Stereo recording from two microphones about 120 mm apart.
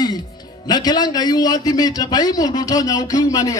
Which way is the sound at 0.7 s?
35° left (ahead or behind).